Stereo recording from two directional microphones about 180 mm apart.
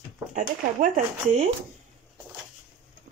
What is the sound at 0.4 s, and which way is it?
Speech, 45° right (ahead or behind).